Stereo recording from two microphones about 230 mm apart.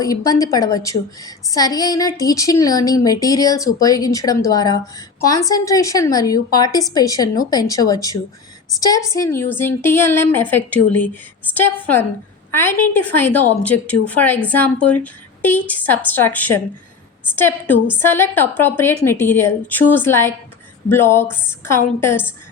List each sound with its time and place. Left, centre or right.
0.0 s a woman's voice: centre